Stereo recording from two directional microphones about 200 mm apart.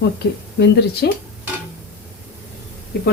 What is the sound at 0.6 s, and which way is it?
Speech, 55° left (ahead or behind).